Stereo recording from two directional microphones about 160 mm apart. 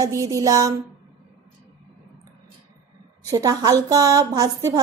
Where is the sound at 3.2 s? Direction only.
20° right (ahead or behind).